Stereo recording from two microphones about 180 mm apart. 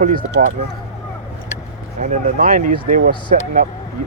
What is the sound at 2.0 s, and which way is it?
Speech, 45° right (ahead or behind).